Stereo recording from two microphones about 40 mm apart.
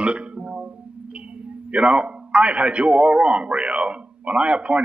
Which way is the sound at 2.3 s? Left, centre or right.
Right.